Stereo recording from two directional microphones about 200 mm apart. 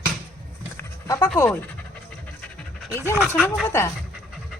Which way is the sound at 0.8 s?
15° left (ahead or behind).